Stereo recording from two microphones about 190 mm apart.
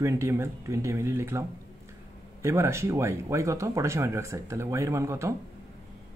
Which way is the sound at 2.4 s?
15° right (ahead or behind).